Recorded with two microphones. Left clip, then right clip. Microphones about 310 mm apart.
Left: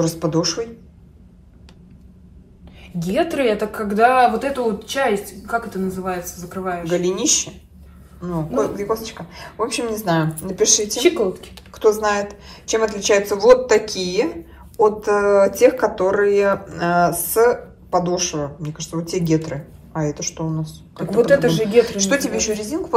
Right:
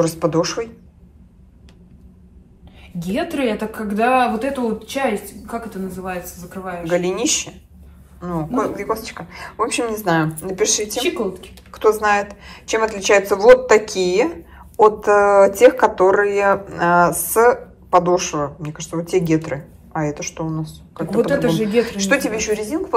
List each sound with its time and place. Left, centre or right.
0.0 s speech: centre
3.0 s speech: left
6.9 s speech: centre